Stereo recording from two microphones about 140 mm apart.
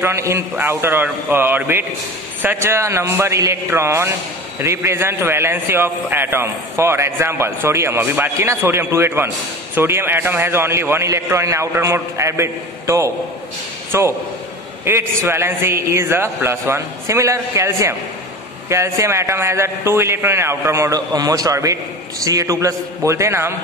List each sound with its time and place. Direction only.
0.0 s a man's voice: 20° right (ahead or behind)